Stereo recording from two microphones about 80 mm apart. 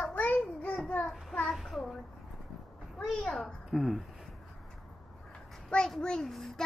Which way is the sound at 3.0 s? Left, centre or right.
Centre.